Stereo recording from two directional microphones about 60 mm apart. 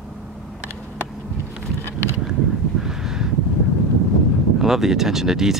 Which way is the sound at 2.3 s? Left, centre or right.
Centre.